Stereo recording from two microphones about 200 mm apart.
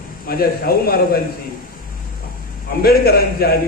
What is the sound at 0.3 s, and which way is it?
Speech, 50° left (ahead or behind).